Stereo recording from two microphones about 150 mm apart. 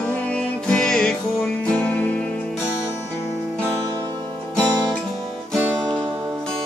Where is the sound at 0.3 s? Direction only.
10° left (ahead or behind).